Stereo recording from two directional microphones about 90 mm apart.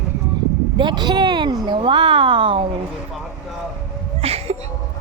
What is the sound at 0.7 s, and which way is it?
Speech, 55° right (ahead or behind).